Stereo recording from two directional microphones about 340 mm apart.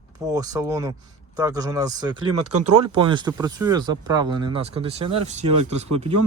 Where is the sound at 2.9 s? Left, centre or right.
Centre.